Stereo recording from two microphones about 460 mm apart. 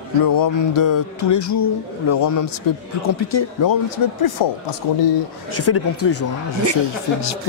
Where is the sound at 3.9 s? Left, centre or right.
Left.